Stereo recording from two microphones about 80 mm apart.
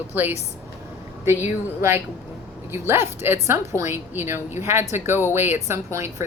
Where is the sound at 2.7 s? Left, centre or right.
Right.